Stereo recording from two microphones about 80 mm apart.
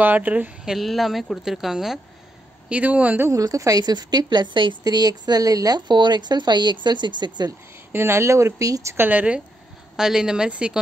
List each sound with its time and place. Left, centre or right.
0.0 s speech: right
0.7 s speech: centre
2.7 s speech: centre
3.3 s speech: right
7.9 s speech: right
8.9 s speech: right
9.9 s speech: centre